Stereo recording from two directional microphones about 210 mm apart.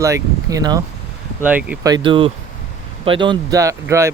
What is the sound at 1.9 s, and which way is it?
Speech, 25° right (ahead or behind).